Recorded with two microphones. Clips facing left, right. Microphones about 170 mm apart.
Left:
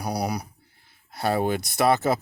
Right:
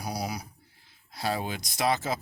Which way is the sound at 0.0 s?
60° left (ahead or behind).